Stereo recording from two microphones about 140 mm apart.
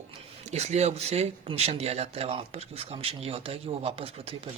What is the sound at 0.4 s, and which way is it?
Speech, 50° right (ahead or behind).